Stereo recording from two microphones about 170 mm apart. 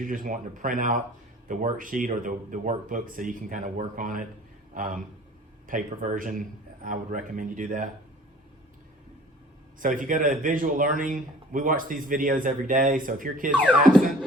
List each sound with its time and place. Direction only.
0.0 s a man's voice: 50° right (ahead or behind)
9.8 s speech: 50° right (ahead or behind)